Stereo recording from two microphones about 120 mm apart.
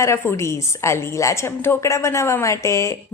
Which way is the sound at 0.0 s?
25° left (ahead or behind).